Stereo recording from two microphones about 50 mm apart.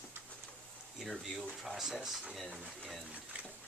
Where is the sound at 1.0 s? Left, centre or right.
Centre.